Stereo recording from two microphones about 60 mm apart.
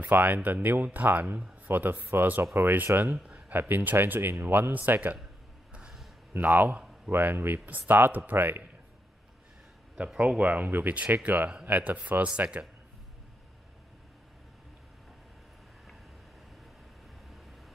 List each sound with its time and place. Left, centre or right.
0.1 s speech: right
6.3 s speech: right
9.9 s speech: right